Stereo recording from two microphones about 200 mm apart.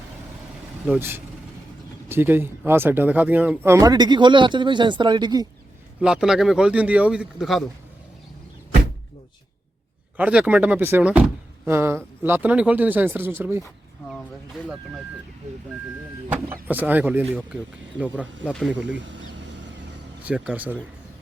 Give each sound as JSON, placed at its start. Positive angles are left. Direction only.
{"t": 0.9, "sound": "speech", "side_deg": -10}
{"t": 6.0, "sound": "speech", "side_deg": -5}
{"t": 10.2, "sound": "speech", "side_deg": -5}
{"t": 14.1, "sound": "speech", "side_deg": 0}
{"t": 16.3, "sound": "speech", "side_deg": -10}
{"t": 18.9, "sound": "a sound", "side_deg": -65}
{"t": 20.2, "sound": "speech", "side_deg": -5}